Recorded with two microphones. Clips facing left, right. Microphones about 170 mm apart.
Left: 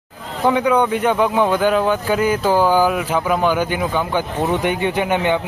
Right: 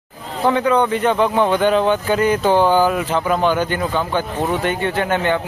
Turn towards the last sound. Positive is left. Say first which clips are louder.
# left 1 dB
turn(degrees=15)  # may be behind; listen again after turning